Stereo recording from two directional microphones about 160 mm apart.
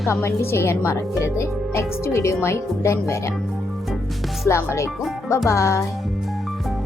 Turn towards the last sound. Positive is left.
turn(degrees=20)  # may be behind; listen again after turning